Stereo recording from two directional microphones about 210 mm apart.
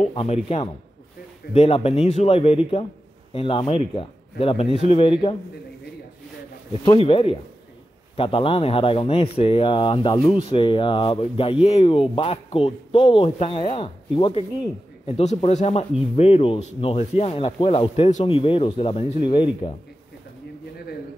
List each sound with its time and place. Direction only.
0.0 s speech: 30° left (ahead or behind)
6.8 s speech: 25° left (ahead or behind)